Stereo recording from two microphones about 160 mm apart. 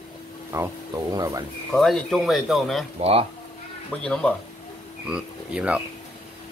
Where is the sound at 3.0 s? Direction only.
40° right (ahead or behind).